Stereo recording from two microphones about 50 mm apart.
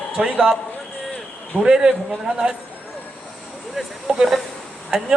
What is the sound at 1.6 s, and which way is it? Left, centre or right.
Speech, centre.